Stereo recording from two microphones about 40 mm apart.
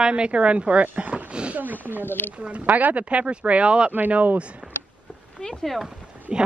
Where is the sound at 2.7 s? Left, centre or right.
Right.